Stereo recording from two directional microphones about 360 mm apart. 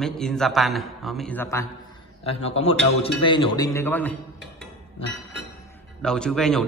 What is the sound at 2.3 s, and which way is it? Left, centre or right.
A man's voice, centre.